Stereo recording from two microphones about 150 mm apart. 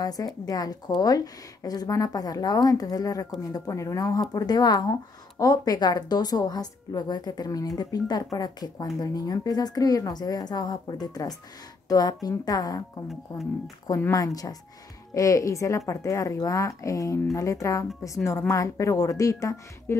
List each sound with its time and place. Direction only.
0.0 s speech: 25° left (ahead or behind)
13.8 s speech: 20° left (ahead or behind)